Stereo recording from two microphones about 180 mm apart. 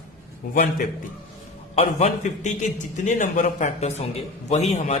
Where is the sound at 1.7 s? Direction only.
40° left (ahead or behind).